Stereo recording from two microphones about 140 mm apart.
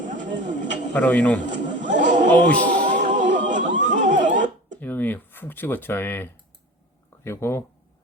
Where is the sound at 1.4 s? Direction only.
65° right (ahead or behind).